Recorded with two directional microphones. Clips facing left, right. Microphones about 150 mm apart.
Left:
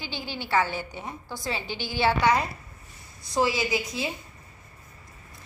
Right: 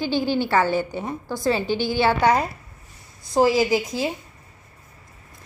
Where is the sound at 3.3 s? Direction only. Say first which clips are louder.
Right 7 dB; 45° right (ahead or behind).